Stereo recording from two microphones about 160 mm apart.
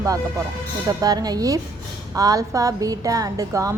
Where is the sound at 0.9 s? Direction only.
25° right (ahead or behind).